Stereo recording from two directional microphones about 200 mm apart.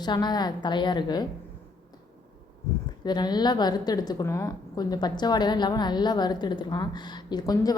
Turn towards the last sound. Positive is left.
turn(degrees=20)  # may be behind; listen again after turning